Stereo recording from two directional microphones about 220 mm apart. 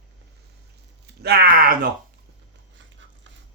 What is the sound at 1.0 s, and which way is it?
Speech, 45° right (ahead or behind).